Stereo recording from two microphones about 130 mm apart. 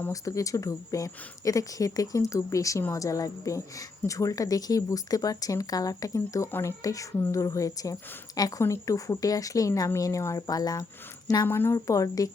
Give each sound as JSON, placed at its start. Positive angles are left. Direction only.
{"t": 0.1, "sound": "a woman's voice", "side_deg": 25}
{"t": 11.4, "sound": "a woman's voice", "side_deg": 15}